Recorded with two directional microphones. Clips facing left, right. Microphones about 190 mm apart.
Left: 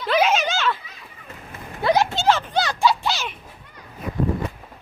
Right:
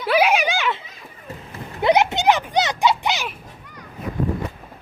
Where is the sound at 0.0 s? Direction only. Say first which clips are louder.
Right 2 dB; 10° right (ahead or behind).